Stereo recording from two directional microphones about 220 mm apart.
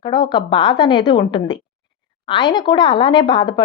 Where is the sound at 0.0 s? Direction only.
20° left (ahead or behind).